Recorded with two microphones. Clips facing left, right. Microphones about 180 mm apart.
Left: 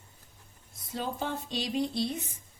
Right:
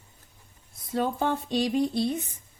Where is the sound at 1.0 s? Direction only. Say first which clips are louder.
Right 7 dB; 60° right (ahead or behind).